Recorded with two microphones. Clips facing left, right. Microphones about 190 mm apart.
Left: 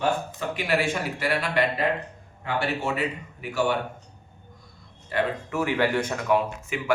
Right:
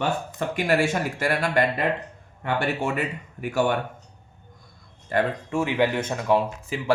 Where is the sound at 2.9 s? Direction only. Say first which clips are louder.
Even; 50° right (ahead or behind).